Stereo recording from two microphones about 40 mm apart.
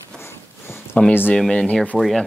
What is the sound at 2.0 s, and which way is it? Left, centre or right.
Speech, centre.